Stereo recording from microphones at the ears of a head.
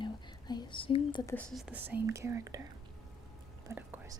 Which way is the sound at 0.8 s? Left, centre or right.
Left.